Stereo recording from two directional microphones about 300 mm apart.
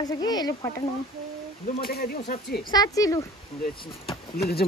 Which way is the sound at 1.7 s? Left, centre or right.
Left.